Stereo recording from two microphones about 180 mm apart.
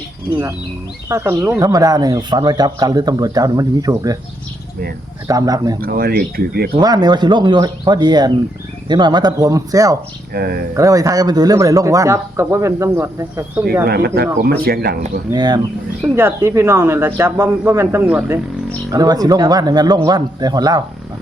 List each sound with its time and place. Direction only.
1.0 s speech: 15° right (ahead or behind)
5.3 s speech: 20° right (ahead or behind)
5.8 s speech: 55° right (ahead or behind)
6.7 s speech: 20° right (ahead or behind)
10.3 s speech: 60° right (ahead or behind)
10.8 s speech: 20° right (ahead or behind)
13.8 s speech: 60° right (ahead or behind)
15.3 s speech: 20° right (ahead or behind)
18.9 s speech: 20° right (ahead or behind)